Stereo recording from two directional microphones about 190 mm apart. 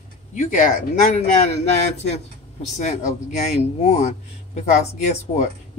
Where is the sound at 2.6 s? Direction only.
40° left (ahead or behind).